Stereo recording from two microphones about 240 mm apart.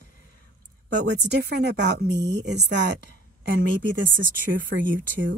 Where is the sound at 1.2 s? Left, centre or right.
Right.